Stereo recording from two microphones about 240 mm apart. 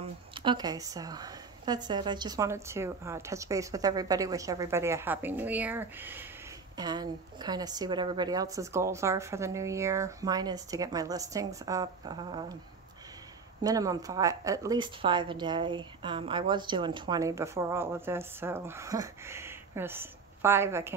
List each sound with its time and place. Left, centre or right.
0.0 s a woman's voice: right
13.6 s a woman's voice: centre